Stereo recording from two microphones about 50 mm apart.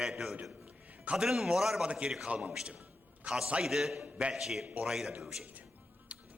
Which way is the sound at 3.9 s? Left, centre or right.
Right.